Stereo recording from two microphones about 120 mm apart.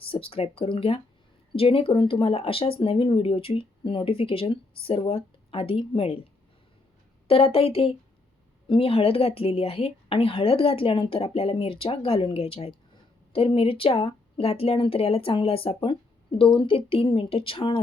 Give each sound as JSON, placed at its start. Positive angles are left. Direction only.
{"t": 0.1, "sound": "speech", "side_deg": 50}
{"t": 7.3, "sound": "speech", "side_deg": 50}